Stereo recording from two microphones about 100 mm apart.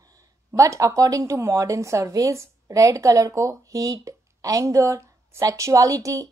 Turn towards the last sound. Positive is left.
turn(degrees=-35)  # may be behind; listen again after turning